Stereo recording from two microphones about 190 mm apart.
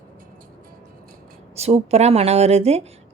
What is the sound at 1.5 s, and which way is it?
Speech, 35° right (ahead or behind).